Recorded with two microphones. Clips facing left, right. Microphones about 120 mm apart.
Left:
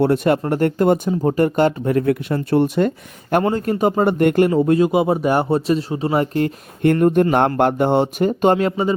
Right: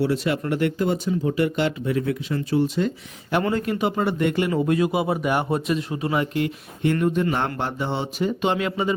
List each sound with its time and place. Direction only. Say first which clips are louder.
0.0 s speech: left 6 dB; 50° left (ahead or behind)
3.4 s speech: left 5 dB; 35° left (ahead or behind)
4.5 s speech: left 6 dB; 30° left (ahead or behind)